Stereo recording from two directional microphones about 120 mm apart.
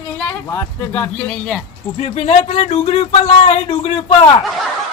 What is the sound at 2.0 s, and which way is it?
Speech, 55° left (ahead or behind).